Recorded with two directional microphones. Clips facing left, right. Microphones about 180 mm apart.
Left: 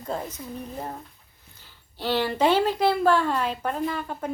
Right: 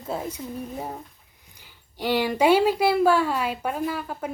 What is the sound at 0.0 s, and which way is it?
Speech, 5° right (ahead or behind).